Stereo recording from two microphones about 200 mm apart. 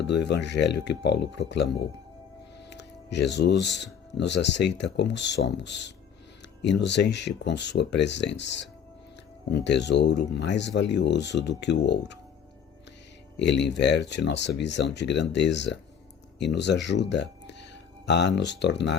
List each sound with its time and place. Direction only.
0.1 s speech: 60° left (ahead or behind)
13.3 s speech: 60° left (ahead or behind)